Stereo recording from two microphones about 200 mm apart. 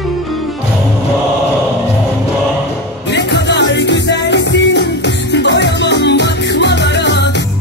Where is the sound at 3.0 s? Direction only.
60° left (ahead or behind).